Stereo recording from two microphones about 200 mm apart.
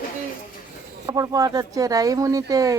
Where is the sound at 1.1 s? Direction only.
20° right (ahead or behind).